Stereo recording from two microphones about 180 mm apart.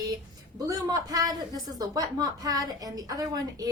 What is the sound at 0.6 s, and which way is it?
A woman's voice, 20° right (ahead or behind).